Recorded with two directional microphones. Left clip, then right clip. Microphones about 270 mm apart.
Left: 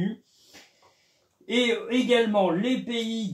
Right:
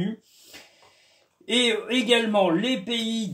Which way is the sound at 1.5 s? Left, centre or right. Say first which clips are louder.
Right 2 dB; right.